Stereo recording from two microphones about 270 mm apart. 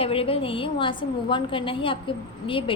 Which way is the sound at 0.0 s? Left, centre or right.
Left.